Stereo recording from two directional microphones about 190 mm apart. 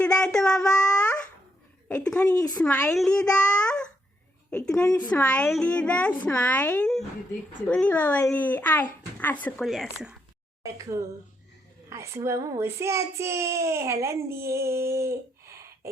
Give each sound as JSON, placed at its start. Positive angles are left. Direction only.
{"t": 0.0, "sound": "a sound", "side_deg": 5}
{"t": 1.9, "sound": "a child's voice", "side_deg": 5}
{"t": 2.9, "sound": "a child's voice", "side_deg": 5}
{"t": 3.3, "sound": "a sound", "side_deg": 5}
{"t": 4.5, "sound": "a child's voice", "side_deg": 5}
{"t": 4.9, "sound": "speech", "side_deg": 20}
{"t": 5.2, "sound": "a child's voice", "side_deg": 5}
{"t": 10.6, "sound": "a child's voice", "side_deg": -15}